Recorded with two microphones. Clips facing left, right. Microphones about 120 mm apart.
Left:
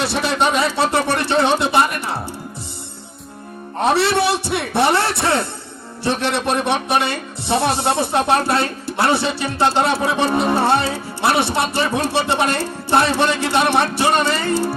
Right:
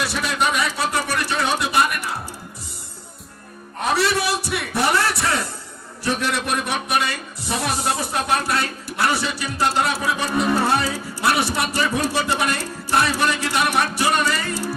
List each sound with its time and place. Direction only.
0.0 s a man's voice: 30° left (ahead or behind)
3.8 s a man's voice: 30° left (ahead or behind)